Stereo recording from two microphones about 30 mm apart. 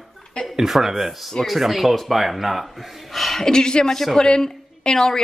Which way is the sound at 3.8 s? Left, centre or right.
Centre.